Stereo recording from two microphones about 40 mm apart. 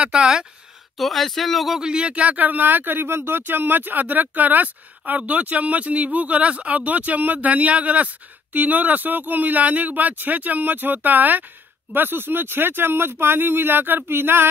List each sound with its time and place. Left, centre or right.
0.0 s speech: right
0.9 s speech: centre
1.8 s speech: right
2.4 s speech: right
3.1 s speech: right
11.9 s speech: right